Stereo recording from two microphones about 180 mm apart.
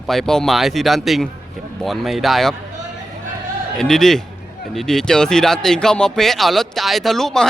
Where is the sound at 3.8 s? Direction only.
Centre (ahead or behind).